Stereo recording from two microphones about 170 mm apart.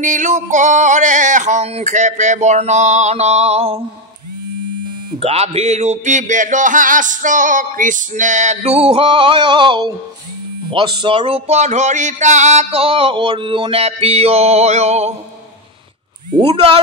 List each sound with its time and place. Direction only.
0.0 s speech: 50° right (ahead or behind)
5.2 s speech: 35° right (ahead or behind)
16.3 s speech: 30° right (ahead or behind)